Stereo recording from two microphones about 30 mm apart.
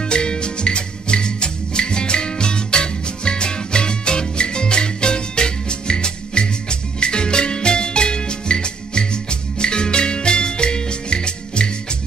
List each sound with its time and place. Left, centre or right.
0.0 s music: left